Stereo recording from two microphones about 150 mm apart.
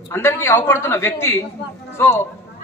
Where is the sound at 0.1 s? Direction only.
15° left (ahead or behind).